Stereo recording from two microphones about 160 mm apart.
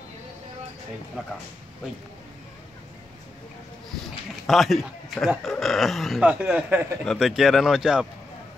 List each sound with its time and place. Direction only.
4.5 s speech: centre (ahead or behind)